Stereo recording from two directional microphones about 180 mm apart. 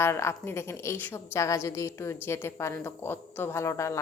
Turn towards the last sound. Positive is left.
turn(degrees=15)  # may be behind; listen again after turning